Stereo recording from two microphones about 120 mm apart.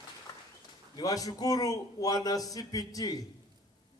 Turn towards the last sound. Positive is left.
turn(degrees=30)  # may be behind; listen again after turning